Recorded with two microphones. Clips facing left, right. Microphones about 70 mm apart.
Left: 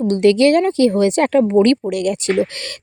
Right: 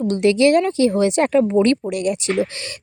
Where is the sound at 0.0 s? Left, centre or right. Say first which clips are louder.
Left 3 dB; left.